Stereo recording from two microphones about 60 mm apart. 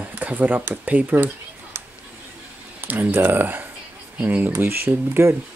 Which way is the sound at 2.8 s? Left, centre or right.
Right.